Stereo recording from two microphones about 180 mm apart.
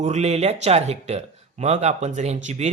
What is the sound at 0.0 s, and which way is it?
Speech, 35° right (ahead or behind).